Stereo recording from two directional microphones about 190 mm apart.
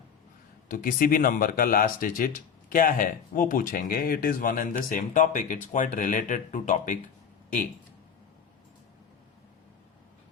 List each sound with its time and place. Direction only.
0.7 s speech: 45° left (ahead or behind)